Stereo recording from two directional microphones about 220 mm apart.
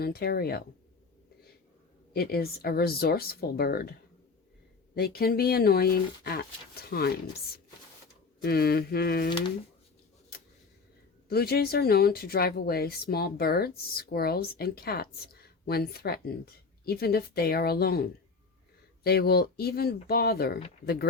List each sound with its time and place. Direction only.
0.0 s speech: 45° left (ahead or behind)
2.1 s speech: 45° left (ahead or behind)
4.9 s speech: 45° left (ahead or behind)
8.4 s speech: 45° left (ahead or behind)
10.3 s a sound: 45° left (ahead or behind)
11.3 s speech: 45° left (ahead or behind)